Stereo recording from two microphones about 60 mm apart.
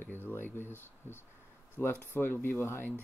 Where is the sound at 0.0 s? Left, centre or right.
Left.